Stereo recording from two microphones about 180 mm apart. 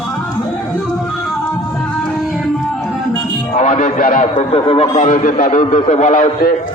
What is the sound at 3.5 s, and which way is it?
Speech, 40° left (ahead or behind).